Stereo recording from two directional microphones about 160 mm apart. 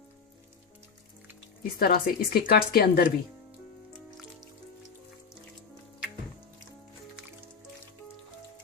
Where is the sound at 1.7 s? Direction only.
70° left (ahead or behind).